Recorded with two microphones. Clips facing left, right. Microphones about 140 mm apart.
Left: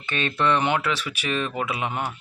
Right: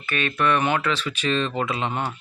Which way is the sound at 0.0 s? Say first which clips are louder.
Right 1 dB; 30° left (ahead or behind).